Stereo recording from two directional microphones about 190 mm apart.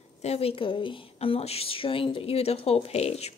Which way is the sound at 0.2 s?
30° left (ahead or behind).